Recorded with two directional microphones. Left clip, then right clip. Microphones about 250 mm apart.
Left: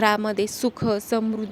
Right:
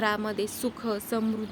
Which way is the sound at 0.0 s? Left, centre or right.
Left.